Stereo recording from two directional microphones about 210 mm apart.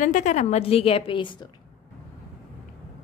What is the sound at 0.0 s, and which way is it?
A woman's voice, 35° left (ahead or behind).